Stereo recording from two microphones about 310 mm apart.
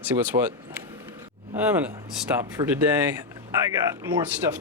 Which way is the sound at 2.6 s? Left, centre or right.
Centre.